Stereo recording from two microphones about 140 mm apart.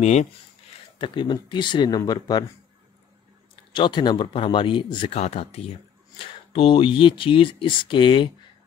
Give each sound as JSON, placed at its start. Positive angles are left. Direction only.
{"t": 0.0, "sound": "speech", "side_deg": 55}
{"t": 0.9, "sound": "speech", "side_deg": 35}
{"t": 3.7, "sound": "speech", "side_deg": 35}